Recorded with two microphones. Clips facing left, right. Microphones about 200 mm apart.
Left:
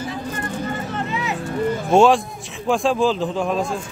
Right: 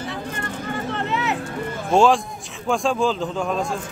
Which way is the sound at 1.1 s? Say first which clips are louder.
Right 4 dB; 65° right (ahead or behind).